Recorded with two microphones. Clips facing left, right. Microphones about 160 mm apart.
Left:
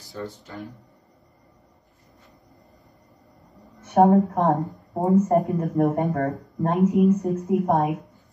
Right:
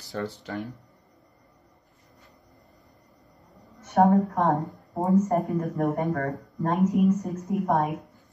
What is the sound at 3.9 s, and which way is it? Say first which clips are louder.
A woman's voice: left 3 dB; 20° left (ahead or behind).